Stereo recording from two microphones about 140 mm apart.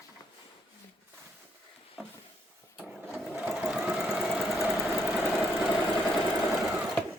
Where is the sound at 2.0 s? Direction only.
5° right (ahead or behind).